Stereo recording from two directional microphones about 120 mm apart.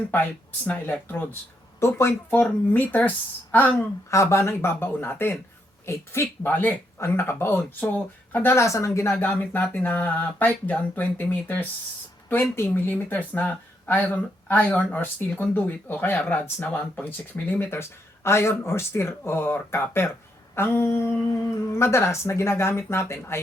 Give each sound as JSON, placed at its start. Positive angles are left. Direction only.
{"t": 0.6, "sound": "speech", "side_deg": 15}